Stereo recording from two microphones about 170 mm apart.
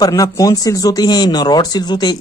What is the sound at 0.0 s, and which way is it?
Speech, 20° left (ahead or behind).